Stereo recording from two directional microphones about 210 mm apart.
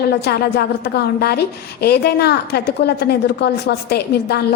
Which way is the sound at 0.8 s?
50° left (ahead or behind).